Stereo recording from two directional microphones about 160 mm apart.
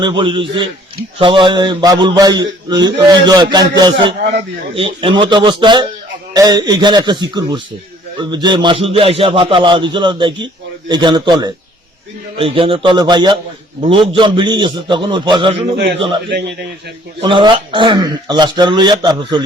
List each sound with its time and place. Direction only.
0.0 s a man's voice: 30° right (ahead or behind)
15.7 s a man's voice: 90° right
16.0 s a man's voice: 35° right (ahead or behind)